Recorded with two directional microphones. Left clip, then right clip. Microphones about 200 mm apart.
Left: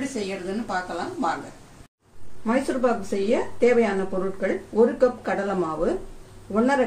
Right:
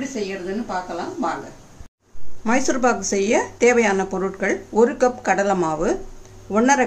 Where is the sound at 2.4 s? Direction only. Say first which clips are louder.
Right 4 dB; 40° right (ahead or behind).